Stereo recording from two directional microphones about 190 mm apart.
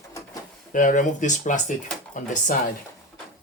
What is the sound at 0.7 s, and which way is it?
Speech, 40° left (ahead or behind).